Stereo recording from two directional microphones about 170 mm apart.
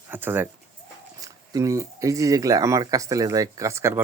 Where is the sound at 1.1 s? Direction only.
20° right (ahead or behind).